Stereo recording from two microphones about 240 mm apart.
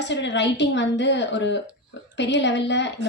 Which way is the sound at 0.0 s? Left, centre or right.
Left.